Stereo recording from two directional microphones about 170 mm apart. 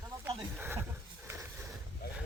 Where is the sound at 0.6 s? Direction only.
15° right (ahead or behind).